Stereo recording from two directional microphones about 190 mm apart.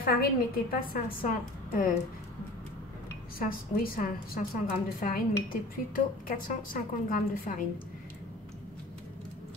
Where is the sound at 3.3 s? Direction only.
50° left (ahead or behind).